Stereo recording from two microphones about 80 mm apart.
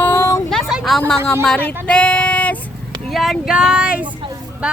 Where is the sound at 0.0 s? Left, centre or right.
Left.